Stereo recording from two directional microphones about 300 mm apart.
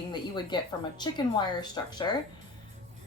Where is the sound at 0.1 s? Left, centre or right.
Centre.